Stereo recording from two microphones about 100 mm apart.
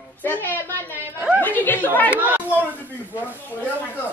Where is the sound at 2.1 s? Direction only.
15° right (ahead or behind).